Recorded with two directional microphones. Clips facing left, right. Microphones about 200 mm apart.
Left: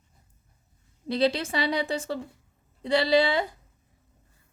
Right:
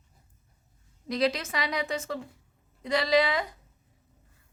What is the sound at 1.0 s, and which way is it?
A woman's voice, 30° left (ahead or behind).